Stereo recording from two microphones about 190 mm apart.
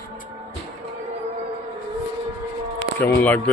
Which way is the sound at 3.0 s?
10° left (ahead or behind).